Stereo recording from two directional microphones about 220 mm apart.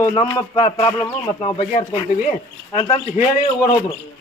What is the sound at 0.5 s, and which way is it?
Speech, 30° left (ahead or behind).